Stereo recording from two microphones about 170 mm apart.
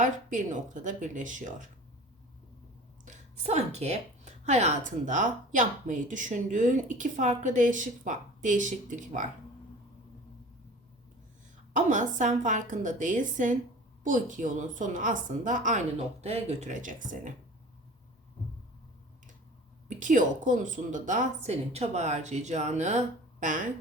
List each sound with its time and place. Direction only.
0.0 s a woman's voice: 50° right (ahead or behind)
3.1 s a woman's voice: 40° right (ahead or behind)
11.7 s a woman's voice: 50° right (ahead or behind)
19.9 s a woman's voice: 50° right (ahead or behind)